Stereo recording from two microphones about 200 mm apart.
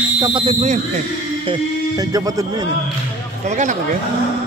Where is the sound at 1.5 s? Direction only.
20° right (ahead or behind).